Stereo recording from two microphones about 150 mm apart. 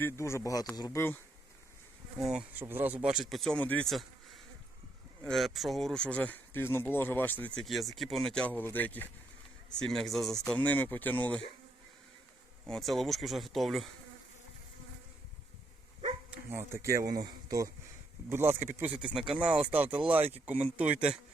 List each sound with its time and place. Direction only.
0.0 s speech: 20° left (ahead or behind)
2.1 s speech: centre (ahead or behind)
2.6 s speech: 15° right (ahead or behind); by 4.0 s 5° left (ahead or behind)
5.2 s speech: centre (ahead or behind)
12.6 s speech: centre (ahead or behind)
16.3 s speech: 15° right (ahead or behind)